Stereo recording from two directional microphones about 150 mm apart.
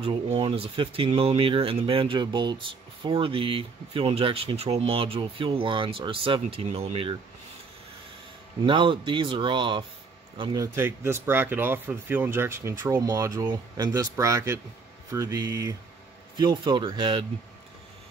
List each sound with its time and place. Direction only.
0.0 s speech: 35° right (ahead or behind)
8.6 s speech: 35° right (ahead or behind)
10.5 s speech: 20° right (ahead or behind)